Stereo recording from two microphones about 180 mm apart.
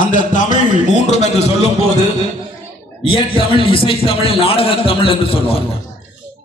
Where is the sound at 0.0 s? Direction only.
45° left (ahead or behind).